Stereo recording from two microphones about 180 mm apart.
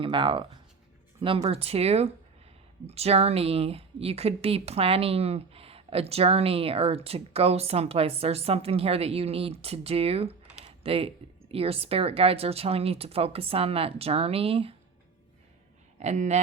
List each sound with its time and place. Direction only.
0.0 s speech: 25° right (ahead or behind)
10.6 s typing: 30° right (ahead or behind)
11.5 s speech: 35° right (ahead or behind)
16.0 s speech: 40° right (ahead or behind)